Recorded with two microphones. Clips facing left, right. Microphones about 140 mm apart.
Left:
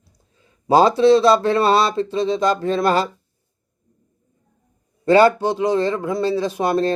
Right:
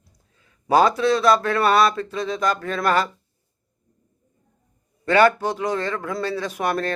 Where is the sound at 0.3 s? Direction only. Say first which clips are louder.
Left 3 dB; 30° left (ahead or behind).